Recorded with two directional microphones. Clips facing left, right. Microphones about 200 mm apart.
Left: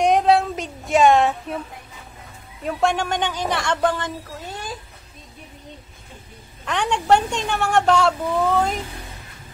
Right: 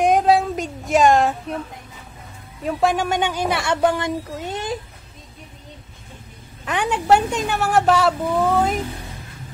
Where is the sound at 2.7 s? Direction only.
Centre (ahead or behind); by 4.8 s 20° right (ahead or behind).